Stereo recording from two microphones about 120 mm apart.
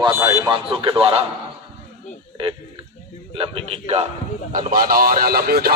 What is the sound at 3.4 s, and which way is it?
Speech, 55° right (ahead or behind).